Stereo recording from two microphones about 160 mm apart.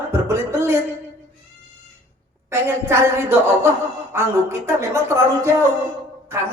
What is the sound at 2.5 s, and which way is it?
Speech, 15° right (ahead or behind).